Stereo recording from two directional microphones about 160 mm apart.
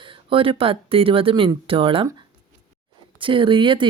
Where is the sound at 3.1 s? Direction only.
30° right (ahead or behind).